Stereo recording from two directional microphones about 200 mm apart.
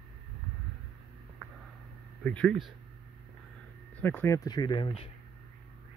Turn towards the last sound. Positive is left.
turn(degrees=25)  # may be behind; listen again after turning